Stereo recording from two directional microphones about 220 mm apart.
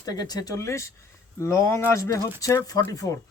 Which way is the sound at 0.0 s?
15° left (ahead or behind).